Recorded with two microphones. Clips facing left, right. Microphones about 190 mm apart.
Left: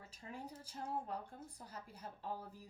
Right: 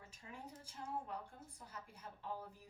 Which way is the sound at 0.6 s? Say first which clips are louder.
Left 2 dB; 35° left (ahead or behind).